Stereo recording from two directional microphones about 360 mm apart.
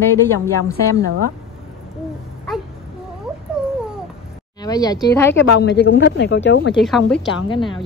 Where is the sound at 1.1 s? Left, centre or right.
Right.